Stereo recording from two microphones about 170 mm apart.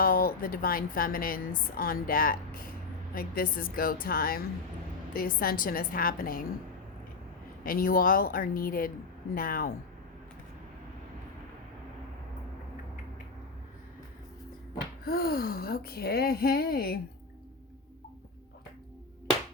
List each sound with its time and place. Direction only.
0.0 s a woman's voice: 55° left (ahead or behind)
7.6 s a woman's voice: 55° left (ahead or behind)
15.0 s a woman's voice: 65° left (ahead or behind)